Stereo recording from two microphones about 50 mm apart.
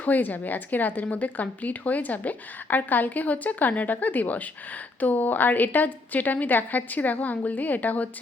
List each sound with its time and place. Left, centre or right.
0.0 s speech: left